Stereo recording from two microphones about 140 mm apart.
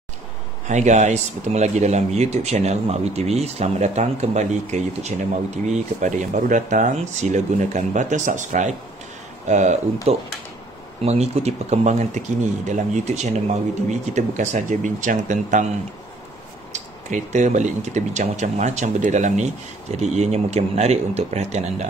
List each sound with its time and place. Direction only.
0.7 s speech: 55° right (ahead or behind)
10.1 s speech: 45° right (ahead or behind); by 15.6 s 60° right (ahead or behind)
16.7 s speech: 60° right (ahead or behind)